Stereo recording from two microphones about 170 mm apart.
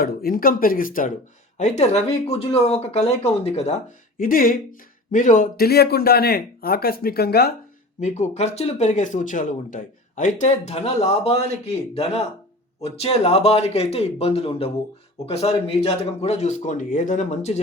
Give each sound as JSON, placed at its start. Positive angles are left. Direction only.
{"t": 0.0, "sound": "speech", "side_deg": 60}
{"t": 1.5, "sound": "speech", "side_deg": 40}
{"t": 4.2, "sound": "speech", "side_deg": 55}
{"t": 8.0, "sound": "speech", "side_deg": 40}
{"t": 12.8, "sound": "speech", "side_deg": 35}